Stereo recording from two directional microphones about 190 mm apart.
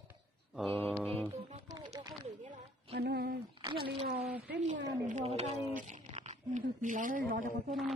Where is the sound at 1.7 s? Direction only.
20° right (ahead or behind).